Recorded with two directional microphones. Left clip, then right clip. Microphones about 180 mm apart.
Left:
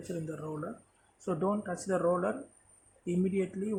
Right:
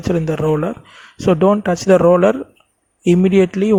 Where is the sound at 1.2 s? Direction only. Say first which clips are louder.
Right 19 dB; 45° right (ahead or behind).